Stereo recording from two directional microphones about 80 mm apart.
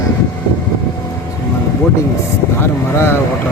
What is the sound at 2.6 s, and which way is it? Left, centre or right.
Speech, left.